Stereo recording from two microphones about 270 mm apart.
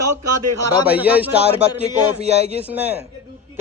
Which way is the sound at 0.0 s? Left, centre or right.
Right.